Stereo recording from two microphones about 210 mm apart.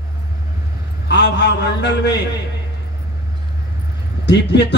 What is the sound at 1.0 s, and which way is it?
A man's voice, 55° left (ahead or behind).